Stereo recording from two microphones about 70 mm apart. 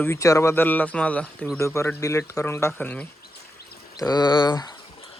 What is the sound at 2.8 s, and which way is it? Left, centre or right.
Speech, centre.